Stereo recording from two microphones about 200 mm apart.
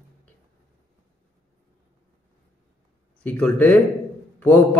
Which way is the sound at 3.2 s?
10° left (ahead or behind).